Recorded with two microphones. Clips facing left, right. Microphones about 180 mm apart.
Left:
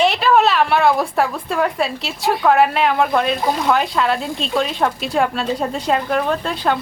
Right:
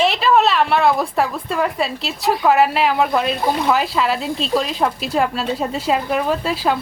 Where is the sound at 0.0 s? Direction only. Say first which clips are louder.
Left 1 dB; centre (ahead or behind).